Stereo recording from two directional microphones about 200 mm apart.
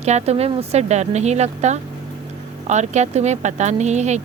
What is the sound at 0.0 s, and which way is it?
Speech, 35° right (ahead or behind).